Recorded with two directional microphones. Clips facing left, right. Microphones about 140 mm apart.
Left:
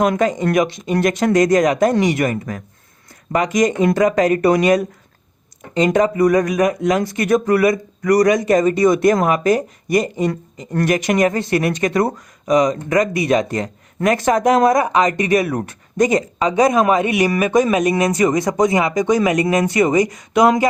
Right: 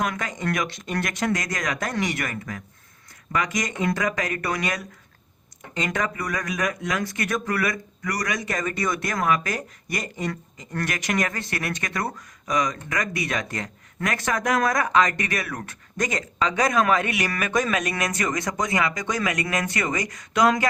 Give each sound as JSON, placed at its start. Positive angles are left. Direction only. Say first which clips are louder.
{"t": 0.0, "sound": "speech", "louder": "left 11 dB", "side_deg": 30}
{"t": 16.7, "sound": "speech", "louder": "left 7 dB", "side_deg": 15}